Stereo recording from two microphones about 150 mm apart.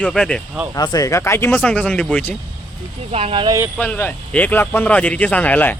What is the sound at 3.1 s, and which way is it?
Speech, 40° right (ahead or behind).